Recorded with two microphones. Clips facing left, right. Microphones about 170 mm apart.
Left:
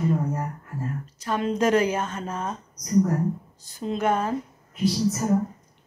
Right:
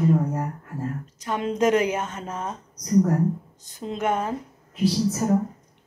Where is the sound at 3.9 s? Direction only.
20° right (ahead or behind).